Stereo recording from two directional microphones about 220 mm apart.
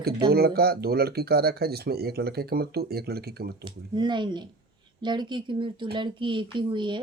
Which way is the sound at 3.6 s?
20° right (ahead or behind).